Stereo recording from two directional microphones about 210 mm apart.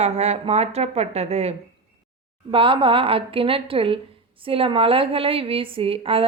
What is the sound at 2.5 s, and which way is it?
A woman's voice, 25° right (ahead or behind).